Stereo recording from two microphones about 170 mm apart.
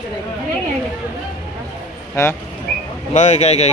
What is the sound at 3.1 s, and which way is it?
Speech, 45° left (ahead or behind).